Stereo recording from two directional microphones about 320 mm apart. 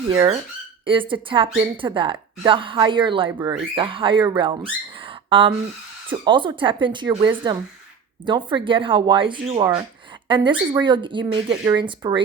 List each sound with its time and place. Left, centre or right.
0.1 s speech: centre